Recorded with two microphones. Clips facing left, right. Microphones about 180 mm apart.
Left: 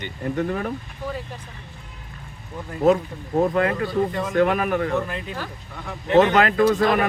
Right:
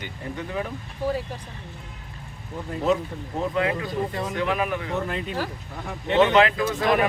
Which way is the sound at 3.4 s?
50° left (ahead or behind).